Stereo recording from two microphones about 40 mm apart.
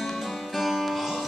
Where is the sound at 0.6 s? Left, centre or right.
Centre.